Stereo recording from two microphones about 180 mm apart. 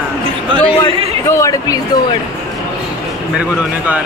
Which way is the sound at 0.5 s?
30° right (ahead or behind).